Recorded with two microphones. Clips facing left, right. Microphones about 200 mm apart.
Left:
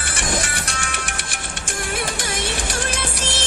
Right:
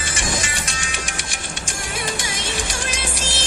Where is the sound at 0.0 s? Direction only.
55° left (ahead or behind).